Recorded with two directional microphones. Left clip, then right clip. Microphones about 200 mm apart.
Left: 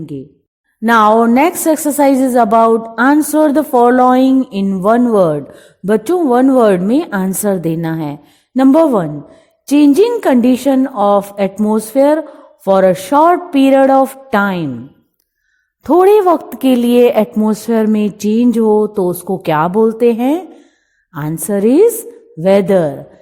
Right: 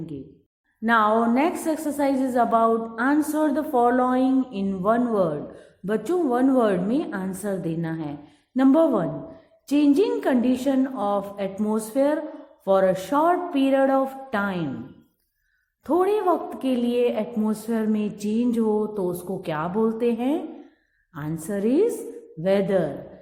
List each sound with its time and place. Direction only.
0.9 s a woman's voice: 45° left (ahead or behind)
15.8 s a woman's voice: 45° left (ahead or behind)